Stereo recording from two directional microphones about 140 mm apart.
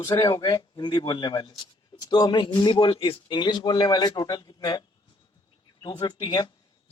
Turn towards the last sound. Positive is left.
turn(degrees=30)  # may be behind; listen again after turning